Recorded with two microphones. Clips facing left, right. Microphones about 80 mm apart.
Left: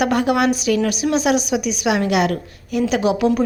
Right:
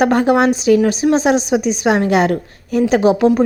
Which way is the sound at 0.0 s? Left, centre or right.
Right.